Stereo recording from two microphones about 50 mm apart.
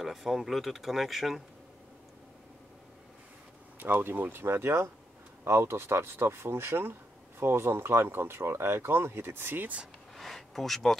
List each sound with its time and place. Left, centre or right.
0.0 s speech: centre
3.8 s speech: right
10.1 s speech: centre